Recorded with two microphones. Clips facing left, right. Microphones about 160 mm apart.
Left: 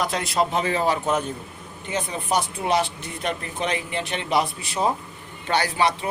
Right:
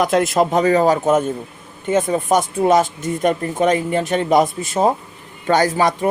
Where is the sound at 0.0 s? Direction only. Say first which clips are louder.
Right 8 dB; 50° right (ahead or behind).